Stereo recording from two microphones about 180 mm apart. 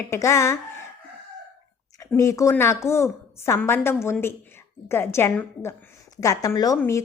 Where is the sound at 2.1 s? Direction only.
15° left (ahead or behind).